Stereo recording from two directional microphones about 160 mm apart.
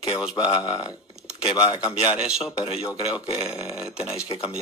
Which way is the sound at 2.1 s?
5° right (ahead or behind).